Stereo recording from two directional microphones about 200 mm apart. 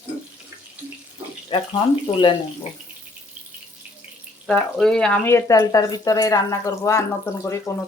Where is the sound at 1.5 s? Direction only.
25° left (ahead or behind).